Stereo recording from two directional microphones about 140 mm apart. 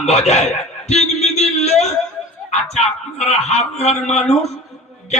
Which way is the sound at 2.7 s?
50° left (ahead or behind).